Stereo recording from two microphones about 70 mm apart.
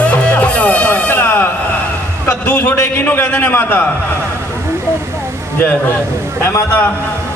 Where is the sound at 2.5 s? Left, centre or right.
Centre.